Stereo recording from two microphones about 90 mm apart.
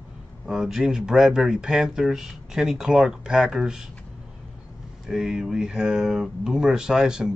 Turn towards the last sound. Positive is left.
turn(degrees=-5)  # may be behind; listen again after turning